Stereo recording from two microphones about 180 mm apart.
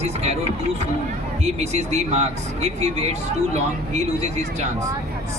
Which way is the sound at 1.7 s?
35° right (ahead or behind).